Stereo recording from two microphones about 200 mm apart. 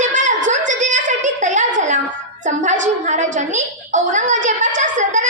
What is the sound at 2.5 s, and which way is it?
A woman's voice, 40° right (ahead or behind).